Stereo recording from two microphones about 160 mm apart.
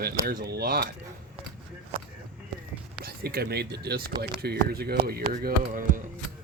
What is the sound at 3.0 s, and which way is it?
Speech, 75° right (ahead or behind).